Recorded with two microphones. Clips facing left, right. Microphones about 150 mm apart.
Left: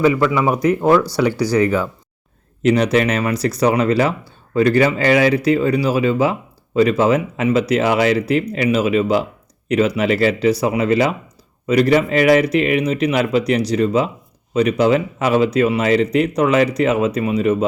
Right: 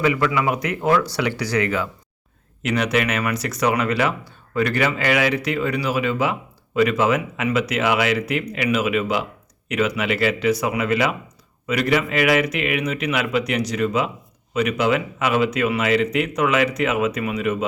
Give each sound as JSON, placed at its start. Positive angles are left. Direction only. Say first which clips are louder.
{"t": 0.0, "sound": "speech", "louder": "left 5 dB", "side_deg": 30}